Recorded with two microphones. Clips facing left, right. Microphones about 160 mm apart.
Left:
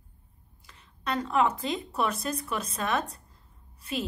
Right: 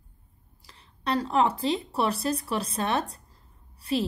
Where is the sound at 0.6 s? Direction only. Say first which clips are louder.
Right 3 dB; 30° right (ahead or behind).